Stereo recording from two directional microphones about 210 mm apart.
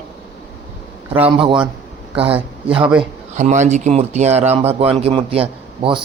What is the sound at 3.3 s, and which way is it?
Speech, 35° right (ahead or behind).